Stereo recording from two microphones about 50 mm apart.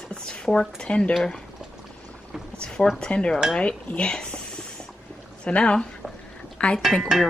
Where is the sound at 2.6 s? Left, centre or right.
Centre.